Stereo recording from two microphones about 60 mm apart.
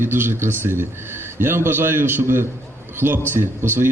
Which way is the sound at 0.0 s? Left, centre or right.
Right.